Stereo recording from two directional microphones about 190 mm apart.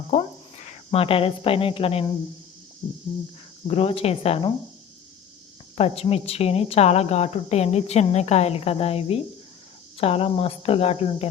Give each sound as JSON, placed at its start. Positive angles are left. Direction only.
{"t": 0.1, "sound": "cricket", "side_deg": 35}
{"t": 0.9, "sound": "a woman's voice", "side_deg": 30}
{"t": 3.7, "sound": "a woman's voice", "side_deg": 30}
{"t": 5.7, "sound": "a woman's voice", "side_deg": 30}